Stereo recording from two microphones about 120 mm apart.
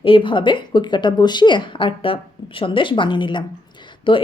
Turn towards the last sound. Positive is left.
turn(degrees=45)  # may be behind; listen again after turning